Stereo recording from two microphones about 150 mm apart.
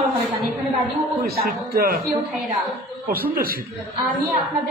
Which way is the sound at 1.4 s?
80° right.